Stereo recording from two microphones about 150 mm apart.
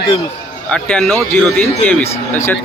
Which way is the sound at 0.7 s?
5° left (ahead or behind).